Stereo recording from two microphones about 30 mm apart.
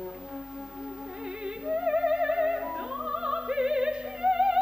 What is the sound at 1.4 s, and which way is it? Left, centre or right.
Music, right.